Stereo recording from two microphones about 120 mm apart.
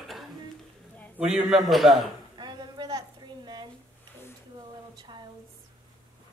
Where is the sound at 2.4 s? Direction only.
35° right (ahead or behind).